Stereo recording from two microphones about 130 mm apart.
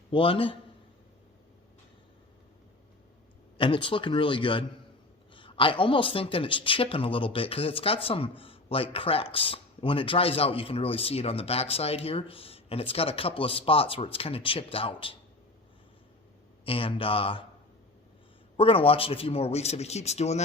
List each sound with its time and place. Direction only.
0.1 s speech: 45° left (ahead or behind)
3.6 s speech: 40° left (ahead or behind)
16.6 s speech: 45° left (ahead or behind)
18.5 s speech: 45° left (ahead or behind)